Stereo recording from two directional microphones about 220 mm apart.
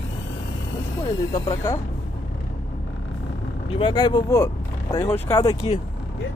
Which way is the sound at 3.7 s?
20° left (ahead or behind).